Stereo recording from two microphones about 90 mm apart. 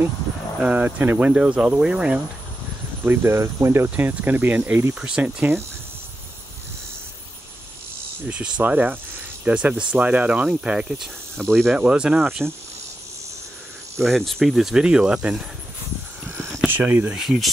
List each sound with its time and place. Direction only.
0.6 s speech: 15° right (ahead or behind)
3.1 s speech: 25° right (ahead or behind)
4.9 s speech: 10° right (ahead or behind)
8.3 s speech: 15° right (ahead or behind)
11.3 s speech: centre (ahead or behind)
11.8 s speech: 10° right (ahead or behind)
12.4 s speech: centre (ahead or behind)
14.0 s speech: centre (ahead or behind)
16.6 s speech: 20° right (ahead or behind)
17.2 s speech: centre (ahead or behind)